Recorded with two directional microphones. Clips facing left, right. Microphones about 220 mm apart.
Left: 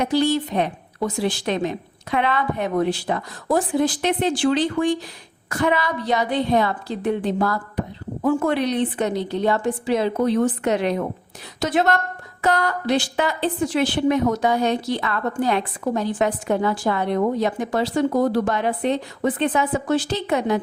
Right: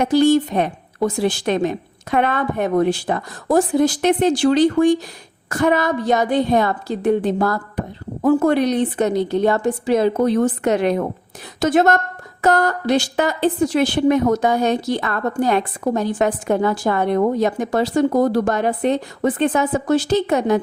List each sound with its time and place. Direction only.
0.0 s a woman's voice: 50° right (ahead or behind)